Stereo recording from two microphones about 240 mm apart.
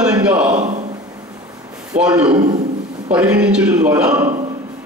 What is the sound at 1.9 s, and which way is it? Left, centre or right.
A man's voice, centre.